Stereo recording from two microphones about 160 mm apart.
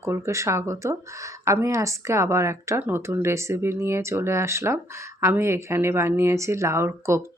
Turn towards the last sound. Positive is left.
turn(degrees=-15)  # may be behind; listen again after turning